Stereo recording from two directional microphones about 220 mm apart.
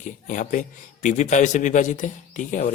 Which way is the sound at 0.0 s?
35° left (ahead or behind).